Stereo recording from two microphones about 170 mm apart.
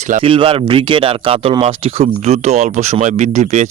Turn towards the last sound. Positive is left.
turn(degrees=-45)  # may be behind; listen again after turning